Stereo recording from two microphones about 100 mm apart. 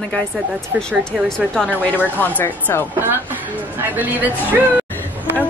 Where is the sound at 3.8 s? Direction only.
20° right (ahead or behind).